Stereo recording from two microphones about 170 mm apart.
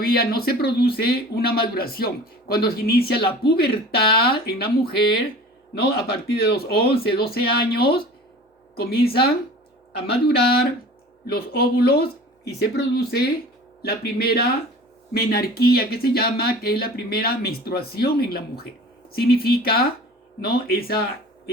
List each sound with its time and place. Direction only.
0.0 s speech: 65° left (ahead or behind)
5.7 s speech: 70° left (ahead or behind)
10.1 s speech: 70° left (ahead or behind)